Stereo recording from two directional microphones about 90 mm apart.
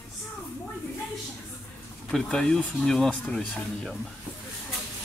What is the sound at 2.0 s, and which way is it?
Speech, 5° left (ahead or behind).